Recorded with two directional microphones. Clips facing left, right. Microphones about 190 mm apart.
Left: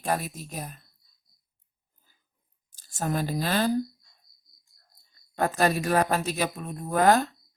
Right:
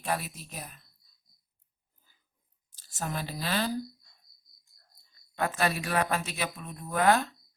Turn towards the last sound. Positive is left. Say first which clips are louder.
# left 4 dB
turn(degrees=40)  # may be behind; listen again after turning